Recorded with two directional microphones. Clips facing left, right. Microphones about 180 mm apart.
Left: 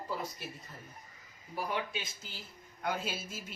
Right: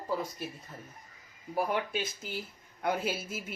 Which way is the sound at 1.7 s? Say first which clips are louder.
Right 5 dB; 60° right (ahead or behind).